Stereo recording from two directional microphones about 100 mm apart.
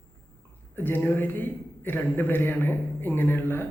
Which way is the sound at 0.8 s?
20° left (ahead or behind).